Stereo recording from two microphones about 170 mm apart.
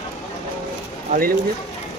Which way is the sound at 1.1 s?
55° right (ahead or behind).